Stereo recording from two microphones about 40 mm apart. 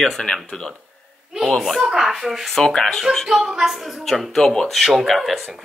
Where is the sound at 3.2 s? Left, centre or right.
Centre.